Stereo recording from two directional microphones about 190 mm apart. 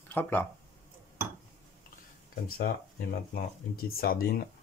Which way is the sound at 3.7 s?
50° left (ahead or behind).